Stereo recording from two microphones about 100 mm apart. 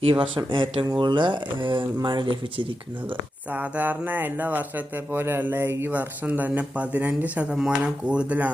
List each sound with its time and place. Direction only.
0.0 s speech: 55° right (ahead or behind)
3.5 s speech: 15° right (ahead or behind)